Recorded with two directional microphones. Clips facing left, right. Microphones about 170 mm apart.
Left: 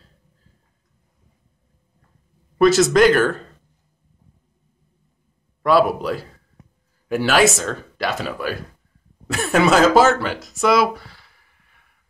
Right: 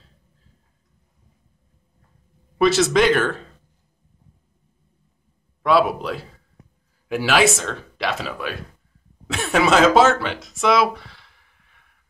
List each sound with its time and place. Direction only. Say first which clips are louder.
2.8 s speech: left 3 dB; centre (ahead or behind)
5.6 s speech: left 2 dB; centre (ahead or behind)